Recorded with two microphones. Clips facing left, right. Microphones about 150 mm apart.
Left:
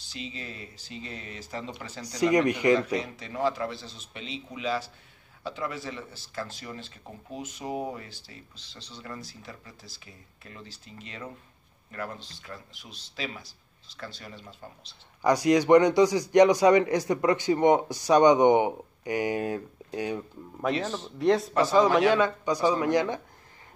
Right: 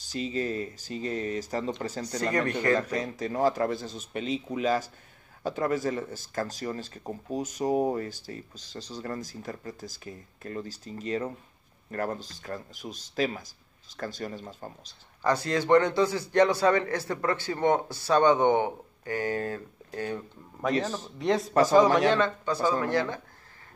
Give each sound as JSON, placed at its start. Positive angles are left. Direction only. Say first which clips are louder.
{"t": 0.0, "sound": "speech", "louder": "right 9 dB", "side_deg": -45}
{"t": 2.0, "sound": "a man's voice", "louder": "left 6 dB", "side_deg": 15}
{"t": 2.8, "sound": "speech", "louder": "even", "side_deg": -45}
{"t": 15.2, "sound": "a man's voice", "louder": "left 4 dB", "side_deg": 15}